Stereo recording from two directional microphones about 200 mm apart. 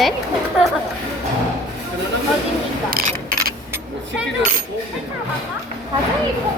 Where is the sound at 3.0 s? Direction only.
50° right (ahead or behind).